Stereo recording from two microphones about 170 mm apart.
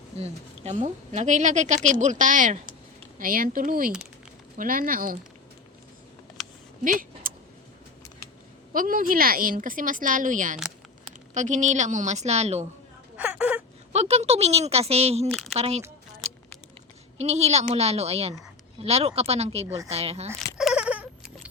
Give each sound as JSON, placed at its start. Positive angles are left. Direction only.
{"t": 0.2, "sound": "a woman's voice", "side_deg": -40}
{"t": 6.8, "sound": "a sound", "side_deg": -55}
{"t": 8.7, "sound": "a woman's voice", "side_deg": -55}
{"t": 13.1, "sound": "whimper", "side_deg": -10}
{"t": 13.9, "sound": "speech", "side_deg": -40}
{"t": 15.3, "sound": "speech", "side_deg": 0}
{"t": 15.5, "sound": "speech", "side_deg": -35}
{"t": 17.2, "sound": "speech", "side_deg": -40}
{"t": 19.6, "sound": "speech", "side_deg": -20}
{"t": 19.9, "sound": "speech", "side_deg": -35}
{"t": 20.6, "sound": "cat", "side_deg": -5}